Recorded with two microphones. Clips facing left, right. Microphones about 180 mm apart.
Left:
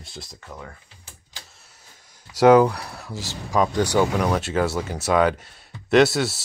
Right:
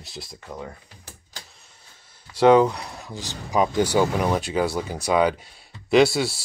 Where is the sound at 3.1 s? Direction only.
Centre (ahead or behind).